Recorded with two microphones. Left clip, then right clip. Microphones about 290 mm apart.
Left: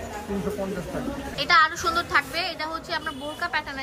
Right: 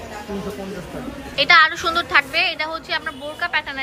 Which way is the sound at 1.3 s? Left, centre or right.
Centre.